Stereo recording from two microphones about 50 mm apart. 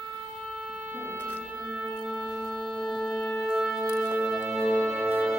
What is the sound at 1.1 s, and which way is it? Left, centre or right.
Music, left.